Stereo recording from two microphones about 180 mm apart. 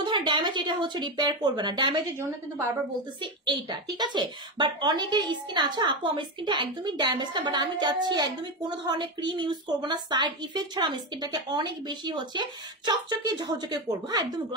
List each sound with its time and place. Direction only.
0.0 s a woman's voice: 25° right (ahead or behind)
4.0 s a woman's voice: 25° right (ahead or behind)